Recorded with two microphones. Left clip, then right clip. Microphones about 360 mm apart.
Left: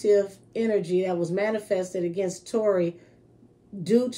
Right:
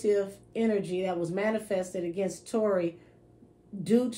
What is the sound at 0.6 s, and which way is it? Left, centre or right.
Speech, centre.